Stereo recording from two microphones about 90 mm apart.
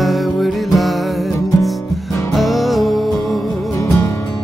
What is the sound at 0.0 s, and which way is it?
Music, centre (ahead or behind).